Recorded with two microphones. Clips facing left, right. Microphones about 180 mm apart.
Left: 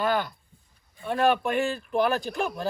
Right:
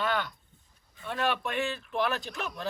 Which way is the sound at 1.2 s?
50° left (ahead or behind).